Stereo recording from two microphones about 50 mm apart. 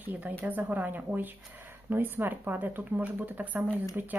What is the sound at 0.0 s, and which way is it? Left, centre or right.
Speech, right.